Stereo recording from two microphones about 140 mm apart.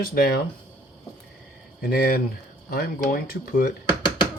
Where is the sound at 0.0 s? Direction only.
90° left.